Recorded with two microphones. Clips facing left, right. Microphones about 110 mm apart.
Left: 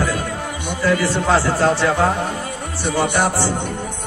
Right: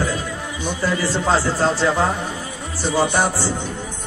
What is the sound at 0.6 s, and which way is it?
Speech, 60° left (ahead or behind).